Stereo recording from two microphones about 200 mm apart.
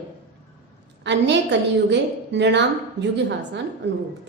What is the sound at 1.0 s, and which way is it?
A woman's voice, 60° right (ahead or behind).